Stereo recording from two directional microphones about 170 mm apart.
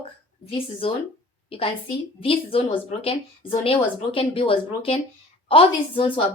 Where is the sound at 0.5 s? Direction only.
30° left (ahead or behind).